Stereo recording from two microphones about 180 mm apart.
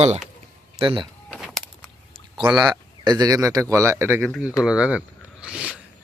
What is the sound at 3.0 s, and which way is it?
A man's voice, 20° right (ahead or behind).